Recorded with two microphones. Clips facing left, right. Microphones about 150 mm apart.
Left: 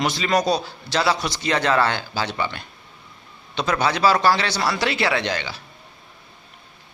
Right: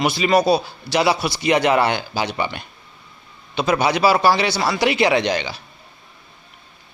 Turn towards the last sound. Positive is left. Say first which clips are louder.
# right 5 dB
turn(degrees=-15)  # may be behind; listen again after turning